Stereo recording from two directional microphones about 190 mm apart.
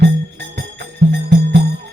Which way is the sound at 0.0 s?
60° right (ahead or behind).